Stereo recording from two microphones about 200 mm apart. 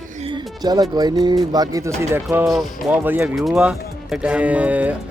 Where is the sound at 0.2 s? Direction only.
25° right (ahead or behind).